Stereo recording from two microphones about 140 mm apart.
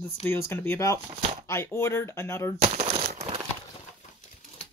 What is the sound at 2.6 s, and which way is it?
Crumpling, 50° right (ahead or behind).